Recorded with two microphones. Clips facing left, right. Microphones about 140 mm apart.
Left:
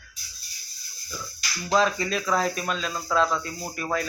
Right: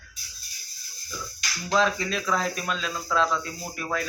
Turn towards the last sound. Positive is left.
turn(degrees=0)  # may be behind; listen again after turning